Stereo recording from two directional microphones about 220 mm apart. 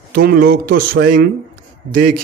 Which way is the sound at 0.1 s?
45° right (ahead or behind).